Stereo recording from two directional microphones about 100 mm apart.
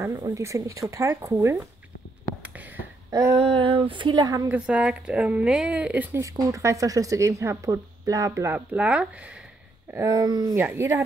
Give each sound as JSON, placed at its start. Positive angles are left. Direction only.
{"t": 0.0, "sound": "speech", "side_deg": -30}
{"t": 3.1, "sound": "a sound", "side_deg": -35}
{"t": 3.3, "sound": "speech", "side_deg": -60}
{"t": 4.5, "sound": "speech", "side_deg": -10}
{"t": 6.1, "sound": "speech", "side_deg": -30}
{"t": 8.5, "sound": "speech", "side_deg": -15}
{"t": 9.9, "sound": "speech", "side_deg": -35}